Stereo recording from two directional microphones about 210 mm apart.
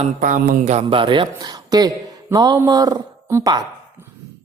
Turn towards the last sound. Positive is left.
turn(degrees=-20)  # may be behind; listen again after turning